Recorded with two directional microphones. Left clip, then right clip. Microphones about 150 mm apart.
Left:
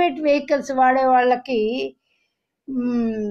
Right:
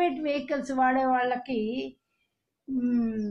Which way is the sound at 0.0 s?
45° left (ahead or behind).